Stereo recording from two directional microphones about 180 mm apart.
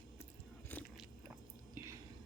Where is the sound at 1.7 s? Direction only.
15° right (ahead or behind).